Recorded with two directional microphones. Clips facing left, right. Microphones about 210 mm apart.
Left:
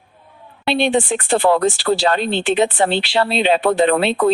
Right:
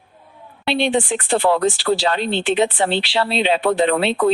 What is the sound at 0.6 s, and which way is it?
Speech, 45° left (ahead or behind).